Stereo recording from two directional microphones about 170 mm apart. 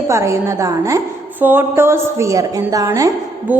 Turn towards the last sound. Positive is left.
turn(degrees=-15)  # may be behind; listen again after turning